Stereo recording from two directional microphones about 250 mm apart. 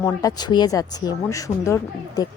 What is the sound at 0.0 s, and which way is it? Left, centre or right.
Speech, centre.